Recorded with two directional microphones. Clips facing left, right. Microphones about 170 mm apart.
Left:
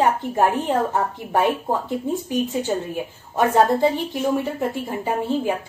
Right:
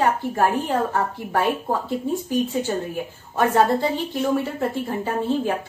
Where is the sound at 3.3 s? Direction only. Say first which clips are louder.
Left 1 dB; 15° left (ahead or behind).